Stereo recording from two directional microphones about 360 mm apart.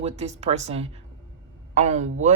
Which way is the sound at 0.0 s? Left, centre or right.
Centre.